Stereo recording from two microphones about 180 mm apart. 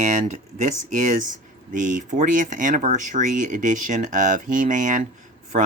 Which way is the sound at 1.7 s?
45° right (ahead or behind).